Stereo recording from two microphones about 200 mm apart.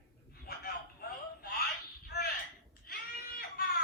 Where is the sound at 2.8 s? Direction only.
50° left (ahead or behind).